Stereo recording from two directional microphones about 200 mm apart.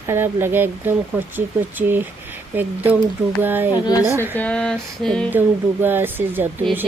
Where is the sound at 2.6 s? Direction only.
10° right (ahead or behind).